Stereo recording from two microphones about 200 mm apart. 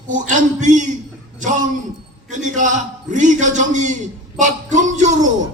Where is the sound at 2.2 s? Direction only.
40° right (ahead or behind).